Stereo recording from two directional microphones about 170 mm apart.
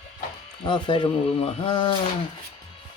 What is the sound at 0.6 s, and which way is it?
Speech, 30° left (ahead or behind).